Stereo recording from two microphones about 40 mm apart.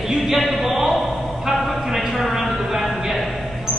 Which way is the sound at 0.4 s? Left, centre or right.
Centre.